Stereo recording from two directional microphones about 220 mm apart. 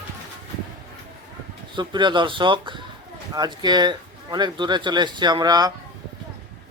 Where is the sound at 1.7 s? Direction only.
20° right (ahead or behind).